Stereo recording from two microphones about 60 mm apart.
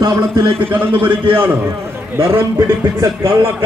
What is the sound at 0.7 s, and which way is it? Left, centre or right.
A man's voice, right.